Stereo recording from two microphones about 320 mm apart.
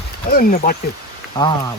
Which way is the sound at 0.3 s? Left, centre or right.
Left.